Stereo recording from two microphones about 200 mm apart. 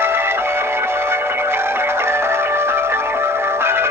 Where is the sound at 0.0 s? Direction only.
10° right (ahead or behind).